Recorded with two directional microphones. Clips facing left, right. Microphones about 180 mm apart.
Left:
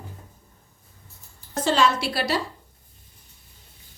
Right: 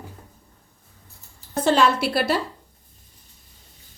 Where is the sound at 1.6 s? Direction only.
55° right (ahead or behind).